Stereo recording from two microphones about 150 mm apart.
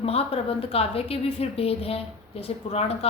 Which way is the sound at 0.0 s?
40° left (ahead or behind).